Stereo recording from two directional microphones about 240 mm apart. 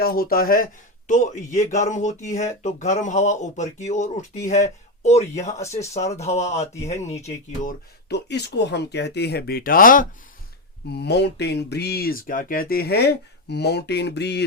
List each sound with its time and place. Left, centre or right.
0.0 s speech: left